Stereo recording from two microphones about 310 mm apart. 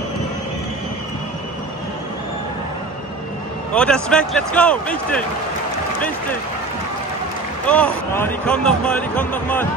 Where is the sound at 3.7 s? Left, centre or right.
Centre.